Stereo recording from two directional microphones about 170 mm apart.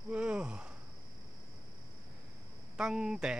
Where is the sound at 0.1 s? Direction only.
5° right (ahead or behind).